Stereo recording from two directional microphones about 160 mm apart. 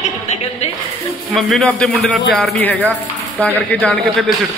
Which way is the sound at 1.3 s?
Centre (ahead or behind).